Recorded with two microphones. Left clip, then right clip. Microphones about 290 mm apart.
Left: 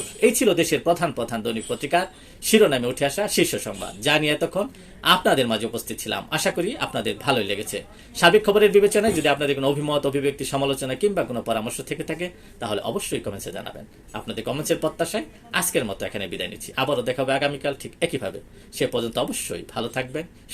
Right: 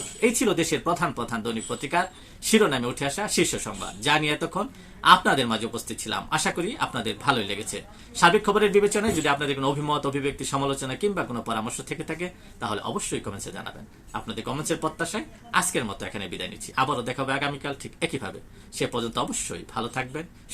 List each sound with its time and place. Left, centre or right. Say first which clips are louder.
0.2 s speech: left 4 dB; centre